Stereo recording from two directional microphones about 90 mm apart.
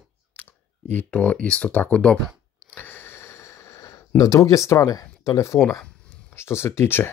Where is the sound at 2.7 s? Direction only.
25° left (ahead or behind).